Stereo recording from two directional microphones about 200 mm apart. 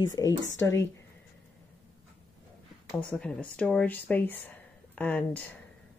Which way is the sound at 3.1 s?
5° left (ahead or behind).